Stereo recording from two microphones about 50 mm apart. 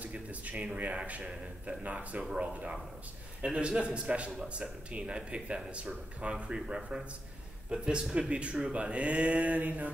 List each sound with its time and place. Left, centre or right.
0.0 s speech: right